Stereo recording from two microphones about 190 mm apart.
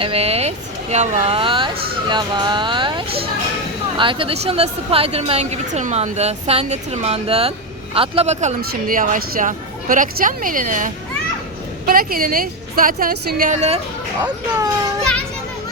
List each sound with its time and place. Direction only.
0.0 s a woman's voice: 30° right (ahead or behind)